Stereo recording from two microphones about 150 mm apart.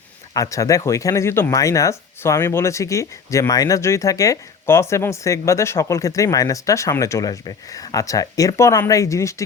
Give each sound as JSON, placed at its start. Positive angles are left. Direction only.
{"t": 0.3, "sound": "speech", "side_deg": 20}